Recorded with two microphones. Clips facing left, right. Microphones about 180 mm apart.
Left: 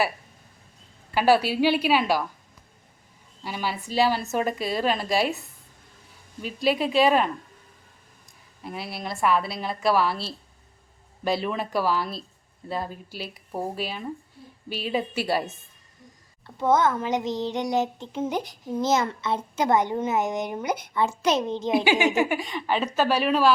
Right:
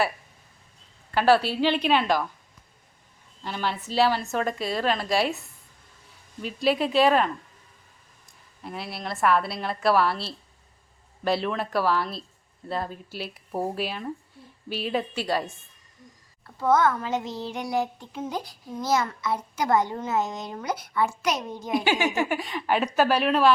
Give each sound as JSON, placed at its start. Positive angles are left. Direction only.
{"t": 1.1, "sound": "a woman's voice", "side_deg": 10}
{"t": 3.4, "sound": "a woman's voice", "side_deg": 10}
{"t": 6.4, "sound": "a woman's voice", "side_deg": 0}
{"t": 8.6, "sound": "a woman's voice", "side_deg": 5}
{"t": 16.6, "sound": "child singing", "side_deg": 20}
{"t": 21.8, "sound": "a woman's voice", "side_deg": 20}
{"t": 22.3, "sound": "a woman's voice", "side_deg": 0}
{"t": 23.0, "sound": "a woman's voice", "side_deg": 0}